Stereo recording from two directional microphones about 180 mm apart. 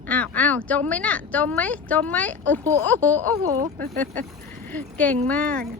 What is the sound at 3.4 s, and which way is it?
Speech, 20° right (ahead or behind).